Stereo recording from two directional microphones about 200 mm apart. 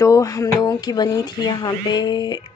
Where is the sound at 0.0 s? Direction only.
15° left (ahead or behind).